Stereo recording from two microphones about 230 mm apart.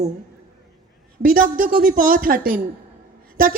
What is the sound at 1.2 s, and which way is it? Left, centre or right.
Speech, right.